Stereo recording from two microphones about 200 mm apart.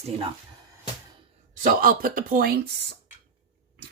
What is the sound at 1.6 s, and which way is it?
Speech, 45° right (ahead or behind).